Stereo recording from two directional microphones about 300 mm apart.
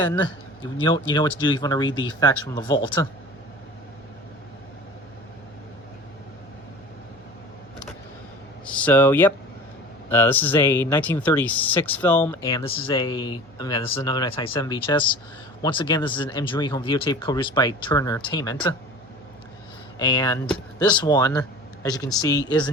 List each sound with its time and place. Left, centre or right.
0.8 s speech: centre
8.6 s speech: centre
20.0 s speech: centre